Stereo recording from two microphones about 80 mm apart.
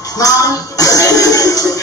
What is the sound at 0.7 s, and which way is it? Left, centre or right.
Music, left.